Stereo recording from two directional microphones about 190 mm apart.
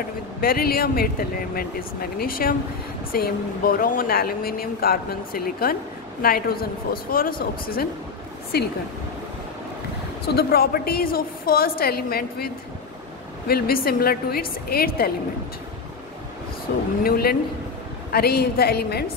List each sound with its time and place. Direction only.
0.4 s a woman's voice: 50° left (ahead or behind)
10.2 s speech: 55° left (ahead or behind)
13.5 s speech: 55° left (ahead or behind)
16.7 s a woman's voice: 60° left (ahead or behind)